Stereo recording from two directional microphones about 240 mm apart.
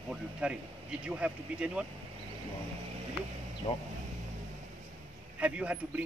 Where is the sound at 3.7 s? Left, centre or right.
Left.